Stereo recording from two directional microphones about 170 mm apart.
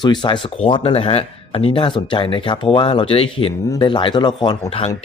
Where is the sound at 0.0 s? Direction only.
25° left (ahead or behind).